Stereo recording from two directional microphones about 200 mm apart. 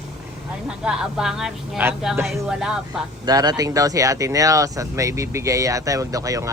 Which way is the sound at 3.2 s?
20° right (ahead or behind).